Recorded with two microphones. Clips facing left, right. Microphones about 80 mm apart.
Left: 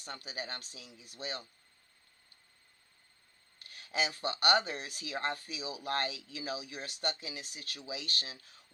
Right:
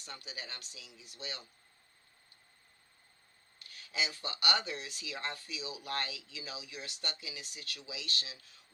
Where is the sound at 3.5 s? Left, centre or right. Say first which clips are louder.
Left 3 dB; left.